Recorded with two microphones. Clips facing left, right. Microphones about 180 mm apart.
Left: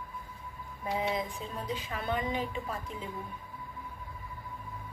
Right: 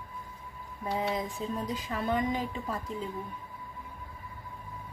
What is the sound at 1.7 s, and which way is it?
Speech, 40° right (ahead or behind).